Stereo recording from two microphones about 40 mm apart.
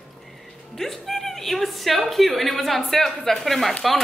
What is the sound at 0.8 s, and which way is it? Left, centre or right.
A woman's voice, centre.